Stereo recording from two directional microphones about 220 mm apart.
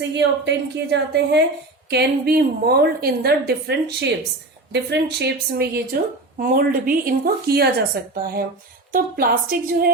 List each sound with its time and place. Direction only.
0.1 s speech: 50° right (ahead or behind)